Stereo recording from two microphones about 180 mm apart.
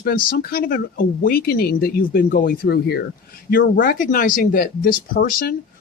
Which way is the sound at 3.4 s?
50° left (ahead or behind).